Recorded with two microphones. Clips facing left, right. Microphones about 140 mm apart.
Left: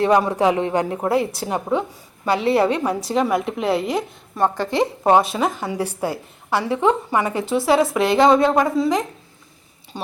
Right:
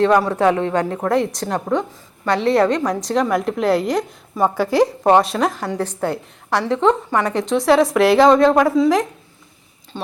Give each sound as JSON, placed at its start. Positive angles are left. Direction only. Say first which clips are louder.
{"t": 0.0, "sound": "a woman's voice", "louder": "right 2 dB", "side_deg": 10}
{"t": 9.9, "sound": "speech", "louder": "right 1 dB", "side_deg": 15}